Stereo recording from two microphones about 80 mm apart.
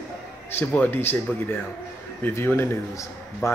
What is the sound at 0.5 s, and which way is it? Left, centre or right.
Speech, left.